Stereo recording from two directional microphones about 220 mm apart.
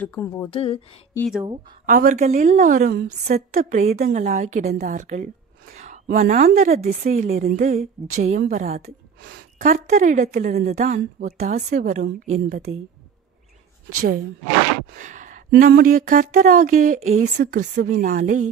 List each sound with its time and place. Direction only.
0.0 s speech: 10° left (ahead or behind)
0.5 s speech: 25° left (ahead or behind)
1.9 s a woman's voice: 40° right (ahead or behind)
13.8 s a woman's voice: 40° right (ahead or behind)
15.0 s a sound: 35° right (ahead or behind)
15.5 s a woman's voice: 40° right (ahead or behind)